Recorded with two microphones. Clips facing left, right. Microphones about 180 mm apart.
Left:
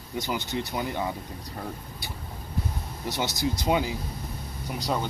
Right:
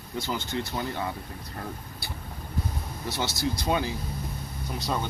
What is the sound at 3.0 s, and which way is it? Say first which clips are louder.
Speech: left 1 dB; 15° left (ahead or behind).